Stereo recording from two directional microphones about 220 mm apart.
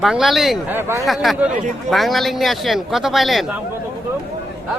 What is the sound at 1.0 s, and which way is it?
Speech, centre (ahead or behind).